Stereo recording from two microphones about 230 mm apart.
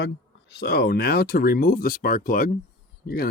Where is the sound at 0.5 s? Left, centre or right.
Left.